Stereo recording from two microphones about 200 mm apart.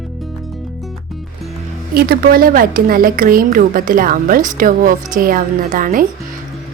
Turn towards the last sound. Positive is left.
turn(degrees=-45)  # may be behind; listen again after turning